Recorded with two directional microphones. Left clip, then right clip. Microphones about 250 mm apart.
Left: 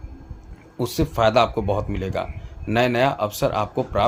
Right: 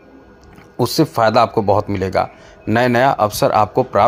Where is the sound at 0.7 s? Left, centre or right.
Centre.